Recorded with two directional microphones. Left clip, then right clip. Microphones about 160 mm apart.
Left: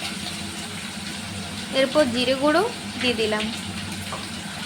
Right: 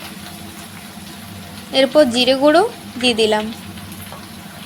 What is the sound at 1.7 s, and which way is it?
A woman's voice, 25° right (ahead or behind).